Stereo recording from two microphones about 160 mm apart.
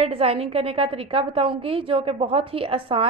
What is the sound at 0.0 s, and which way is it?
A woman's voice, 40° right (ahead or behind).